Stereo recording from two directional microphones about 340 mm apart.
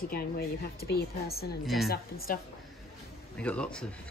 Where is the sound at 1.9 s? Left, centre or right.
Left.